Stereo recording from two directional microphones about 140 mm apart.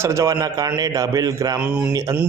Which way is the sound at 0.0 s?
20° right (ahead or behind).